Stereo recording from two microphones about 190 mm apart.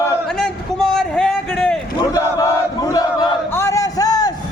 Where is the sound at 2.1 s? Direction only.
15° left (ahead or behind).